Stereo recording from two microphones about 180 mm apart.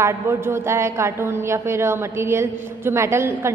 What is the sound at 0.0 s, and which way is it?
A woman's voice, 15° right (ahead or behind).